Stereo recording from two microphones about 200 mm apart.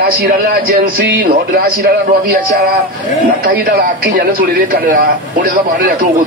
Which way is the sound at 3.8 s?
45° right (ahead or behind).